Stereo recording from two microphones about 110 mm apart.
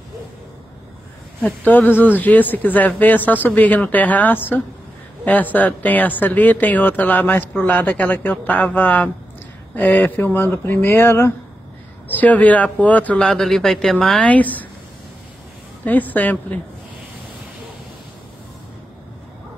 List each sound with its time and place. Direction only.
1.4 s speech: 15° left (ahead or behind)
14.3 s speech: 15° left (ahead or behind)
15.8 s speech: 15° left (ahead or behind)